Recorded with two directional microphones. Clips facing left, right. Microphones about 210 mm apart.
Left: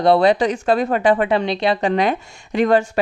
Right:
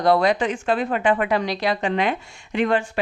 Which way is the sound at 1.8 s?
40° left (ahead or behind).